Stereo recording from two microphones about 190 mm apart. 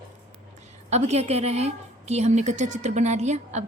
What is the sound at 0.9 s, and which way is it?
A woman's voice, 35° right (ahead or behind).